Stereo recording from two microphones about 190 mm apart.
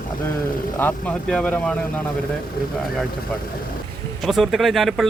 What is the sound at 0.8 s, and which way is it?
Speech, 5° left (ahead or behind).